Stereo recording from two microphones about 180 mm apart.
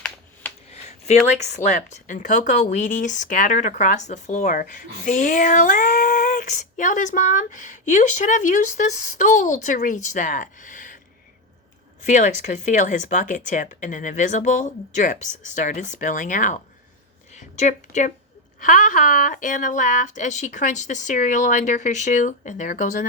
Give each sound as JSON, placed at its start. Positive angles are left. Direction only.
{"t": 0.9, "sound": "a sound", "side_deg": 40}
{"t": 1.3, "sound": "speech", "side_deg": 40}
{"t": 12.0, "sound": "speech", "side_deg": 45}